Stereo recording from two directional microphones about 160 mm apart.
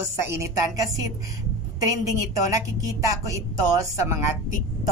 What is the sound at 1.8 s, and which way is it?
A woman's voice, 20° right (ahead or behind).